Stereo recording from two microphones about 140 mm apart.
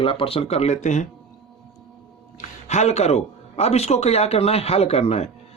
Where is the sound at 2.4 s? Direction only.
55° left (ahead or behind).